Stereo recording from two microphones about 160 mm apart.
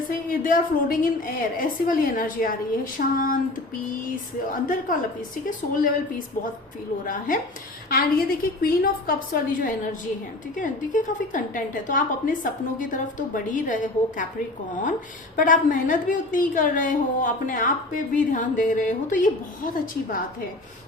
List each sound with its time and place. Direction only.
0.3 s a woman's voice: 60° left (ahead or behind)
4.4 s a woman's voice: 55° left (ahead or behind)
15.4 s a woman's voice: 55° left (ahead or behind)